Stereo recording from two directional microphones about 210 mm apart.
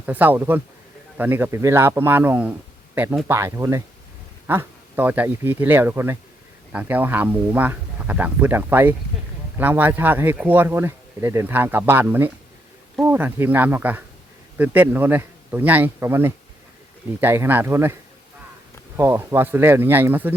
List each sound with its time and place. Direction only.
0.0 s speech: 10° right (ahead or behind)
18.9 s speech: 10° right (ahead or behind)